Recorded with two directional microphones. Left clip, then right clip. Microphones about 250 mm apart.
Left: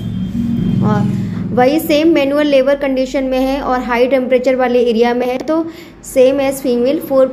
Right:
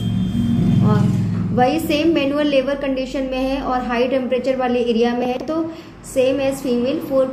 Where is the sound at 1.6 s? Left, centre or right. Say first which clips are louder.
Left 6 dB; left.